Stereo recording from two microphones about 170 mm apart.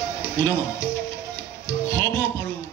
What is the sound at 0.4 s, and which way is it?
Speech, 15° left (ahead or behind).